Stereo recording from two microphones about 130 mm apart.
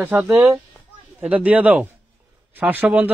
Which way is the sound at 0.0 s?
15° right (ahead or behind).